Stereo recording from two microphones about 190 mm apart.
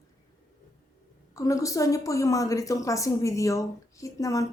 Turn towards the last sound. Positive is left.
turn(degrees=15)  # may be behind; listen again after turning